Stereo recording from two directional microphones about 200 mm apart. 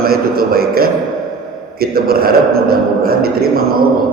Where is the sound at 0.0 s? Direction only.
50° right (ahead or behind).